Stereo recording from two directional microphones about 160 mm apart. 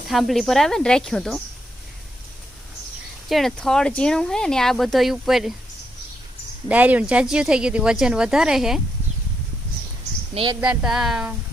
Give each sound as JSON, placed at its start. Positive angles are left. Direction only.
{"t": 0.1, "sound": "speech", "side_deg": 0}
{"t": 3.2, "sound": "speech", "side_deg": 0}
{"t": 6.7, "sound": "speech", "side_deg": -10}
{"t": 10.6, "sound": "speech", "side_deg": -5}